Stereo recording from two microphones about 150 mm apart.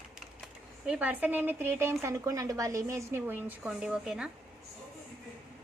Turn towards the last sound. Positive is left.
turn(degrees=-5)  # may be behind; listen again after turning